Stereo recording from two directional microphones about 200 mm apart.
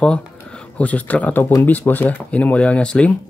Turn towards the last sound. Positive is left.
turn(degrees=5)  # may be behind; listen again after turning